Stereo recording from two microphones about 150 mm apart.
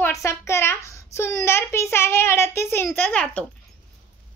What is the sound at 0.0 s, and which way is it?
A child's voice, 20° left (ahead or behind).